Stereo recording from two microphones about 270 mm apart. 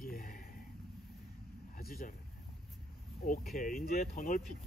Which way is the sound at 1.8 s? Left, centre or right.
Left.